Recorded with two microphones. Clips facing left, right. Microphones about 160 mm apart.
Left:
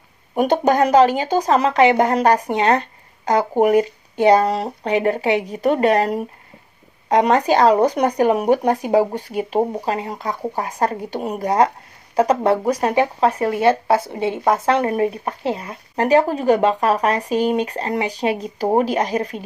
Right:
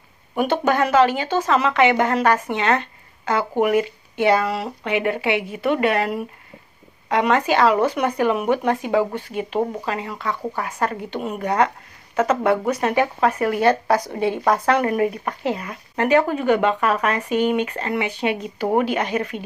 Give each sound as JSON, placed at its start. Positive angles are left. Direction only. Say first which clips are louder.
{"t": 0.3, "sound": "a woman's voice", "louder": "left 3 dB", "side_deg": 40}